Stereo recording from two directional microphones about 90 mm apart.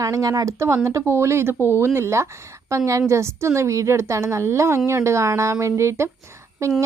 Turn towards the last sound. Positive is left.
turn(degrees=-35)  # may be behind; listen again after turning